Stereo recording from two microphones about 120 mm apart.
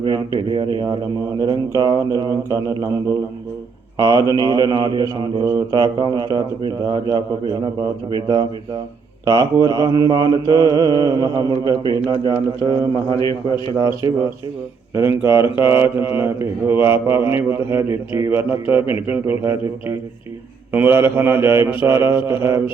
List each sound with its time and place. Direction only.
0.0 s mantra: 45° right (ahead or behind)
3.9 s mantra: 35° right (ahead or behind); by 19.5 s 20° right (ahead or behind)
20.7 s a man's voice: 15° right (ahead or behind)
22.4 s mantra: 20° right (ahead or behind)